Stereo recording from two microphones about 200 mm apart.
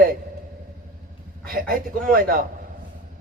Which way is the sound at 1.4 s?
45° right (ahead or behind).